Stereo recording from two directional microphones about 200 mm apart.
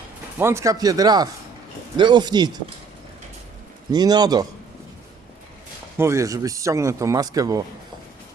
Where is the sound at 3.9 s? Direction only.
20° right (ahead or behind).